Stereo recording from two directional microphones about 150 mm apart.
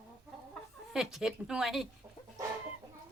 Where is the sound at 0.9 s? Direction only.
5° right (ahead or behind).